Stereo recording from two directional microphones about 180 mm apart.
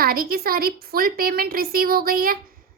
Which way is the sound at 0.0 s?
55° right (ahead or behind).